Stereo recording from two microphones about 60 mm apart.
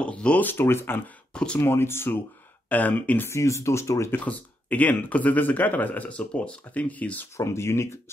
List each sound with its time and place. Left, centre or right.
0.0 s speech: centre
0.5 s speech: left
1.3 s speech: centre
1.6 s speech: left
2.7 s speech: left
3.3 s speech: left
4.1 s speech: left
7.3 s speech: left